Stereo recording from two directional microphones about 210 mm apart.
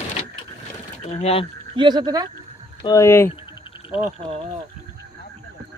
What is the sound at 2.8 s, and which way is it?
Speech, 15° left (ahead or behind).